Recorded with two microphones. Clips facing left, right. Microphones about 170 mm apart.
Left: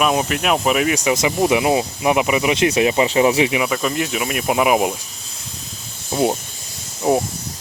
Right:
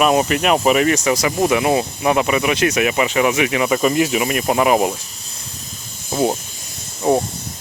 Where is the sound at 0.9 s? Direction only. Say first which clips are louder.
Even; 20° left (ahead or behind).